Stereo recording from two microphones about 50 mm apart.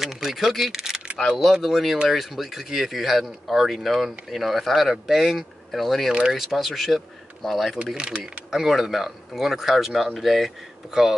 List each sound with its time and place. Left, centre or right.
0.0 s speech: centre
7.9 s speech: centre
8.5 s speech: centre